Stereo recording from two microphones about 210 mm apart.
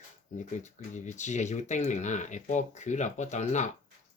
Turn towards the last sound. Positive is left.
turn(degrees=35)  # may be behind; listen again after turning